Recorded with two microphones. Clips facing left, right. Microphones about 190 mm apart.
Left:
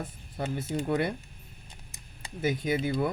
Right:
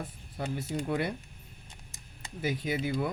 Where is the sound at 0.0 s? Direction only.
40° left (ahead or behind).